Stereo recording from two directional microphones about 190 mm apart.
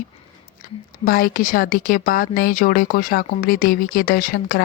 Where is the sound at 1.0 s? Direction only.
50° left (ahead or behind).